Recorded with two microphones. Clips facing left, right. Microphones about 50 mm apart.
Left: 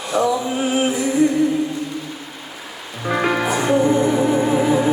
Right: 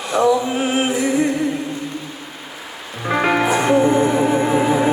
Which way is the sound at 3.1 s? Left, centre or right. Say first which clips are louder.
Right 2 dB; right.